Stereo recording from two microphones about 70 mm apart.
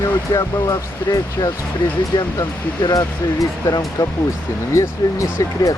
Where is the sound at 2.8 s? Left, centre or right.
Left.